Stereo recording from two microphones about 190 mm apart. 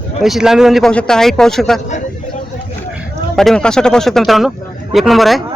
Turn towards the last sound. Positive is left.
turn(degrees=0)  # may be behind; listen again after turning